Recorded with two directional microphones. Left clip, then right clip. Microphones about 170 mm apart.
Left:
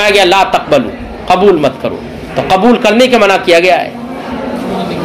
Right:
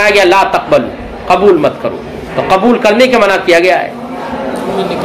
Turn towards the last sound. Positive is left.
turn(degrees=40)  # may be behind; listen again after turning